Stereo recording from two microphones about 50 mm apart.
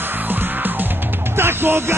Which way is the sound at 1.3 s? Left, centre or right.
Right.